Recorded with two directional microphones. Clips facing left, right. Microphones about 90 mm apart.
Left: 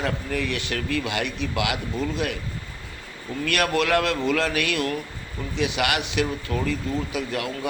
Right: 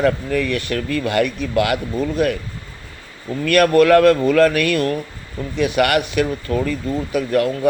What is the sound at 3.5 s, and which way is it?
Speech, 45° right (ahead or behind).